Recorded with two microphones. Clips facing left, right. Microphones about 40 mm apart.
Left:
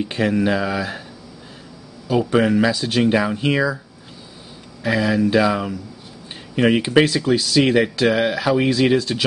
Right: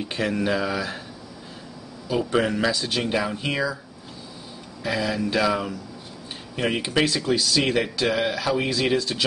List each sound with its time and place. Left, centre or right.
0.0 s speech: centre
2.3 s speech: centre
4.8 s speech: centre